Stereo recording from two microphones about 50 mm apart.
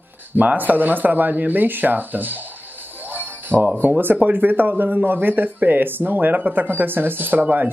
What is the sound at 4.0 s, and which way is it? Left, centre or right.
Speech, right.